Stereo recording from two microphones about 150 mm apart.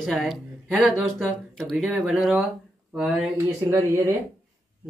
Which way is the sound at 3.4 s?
20° right (ahead or behind).